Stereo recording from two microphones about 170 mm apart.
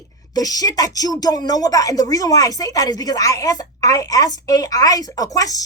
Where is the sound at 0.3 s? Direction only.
20° left (ahead or behind).